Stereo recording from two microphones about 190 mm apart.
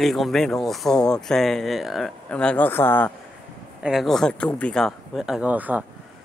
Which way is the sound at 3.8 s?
Centre (ahead or behind).